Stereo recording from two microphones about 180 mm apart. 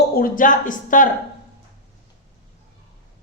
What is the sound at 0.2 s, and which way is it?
Speech, 50° left (ahead or behind).